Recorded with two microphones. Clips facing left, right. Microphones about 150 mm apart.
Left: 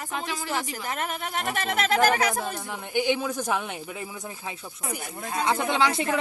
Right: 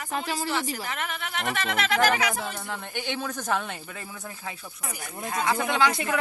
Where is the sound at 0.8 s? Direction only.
40° left (ahead or behind).